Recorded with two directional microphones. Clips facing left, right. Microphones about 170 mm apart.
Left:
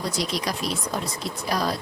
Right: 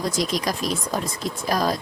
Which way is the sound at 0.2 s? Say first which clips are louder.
Right 3 dB; 45° right (ahead or behind).